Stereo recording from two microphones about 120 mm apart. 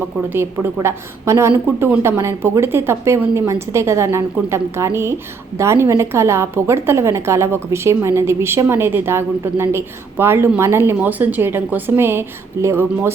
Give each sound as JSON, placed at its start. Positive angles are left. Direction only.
{"t": 0.3, "sound": "a woman's voice", "side_deg": -20}